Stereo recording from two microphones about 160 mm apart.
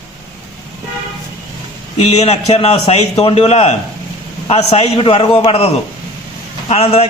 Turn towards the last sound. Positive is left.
turn(degrees=40)  # may be behind; listen again after turning